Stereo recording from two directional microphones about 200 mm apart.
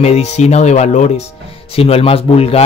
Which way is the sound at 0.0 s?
35° left (ahead or behind).